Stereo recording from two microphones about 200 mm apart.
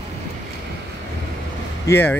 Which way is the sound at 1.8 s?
10° left (ahead or behind).